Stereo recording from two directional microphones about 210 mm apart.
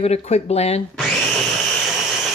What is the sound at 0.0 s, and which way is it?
Speech, 30° left (ahead or behind).